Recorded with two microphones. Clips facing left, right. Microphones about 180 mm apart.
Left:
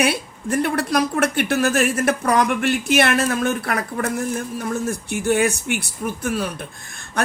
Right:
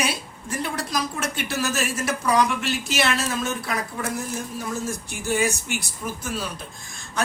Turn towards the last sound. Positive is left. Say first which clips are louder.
# left 4 dB
turn(degrees=60)  # may be behind; listen again after turning